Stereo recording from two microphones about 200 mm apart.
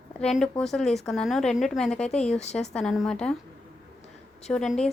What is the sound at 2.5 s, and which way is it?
Speech, centre (ahead or behind).